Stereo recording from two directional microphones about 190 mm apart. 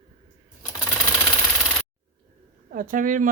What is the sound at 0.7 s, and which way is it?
Sewing machine, 15° left (ahead or behind).